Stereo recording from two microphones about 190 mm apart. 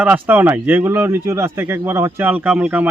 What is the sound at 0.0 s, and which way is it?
Speech, 10° right (ahead or behind).